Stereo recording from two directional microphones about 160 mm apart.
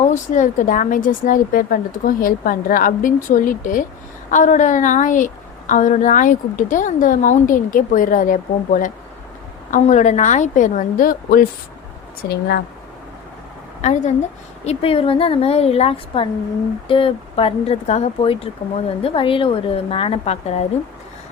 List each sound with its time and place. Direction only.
0.1 s a woman's voice: 50° left (ahead or behind)
12.3 s speech: 85° left
13.8 s a woman's voice: 45° left (ahead or behind)